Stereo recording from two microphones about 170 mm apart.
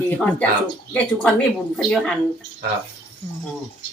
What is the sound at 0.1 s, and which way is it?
Speech, 5° left (ahead or behind).